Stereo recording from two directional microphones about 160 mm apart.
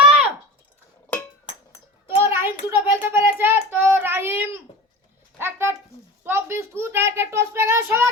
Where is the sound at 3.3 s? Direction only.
15° right (ahead or behind).